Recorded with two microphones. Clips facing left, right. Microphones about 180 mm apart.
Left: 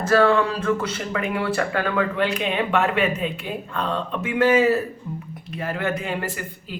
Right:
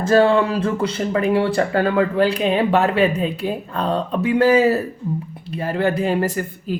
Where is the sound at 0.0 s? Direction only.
25° right (ahead or behind).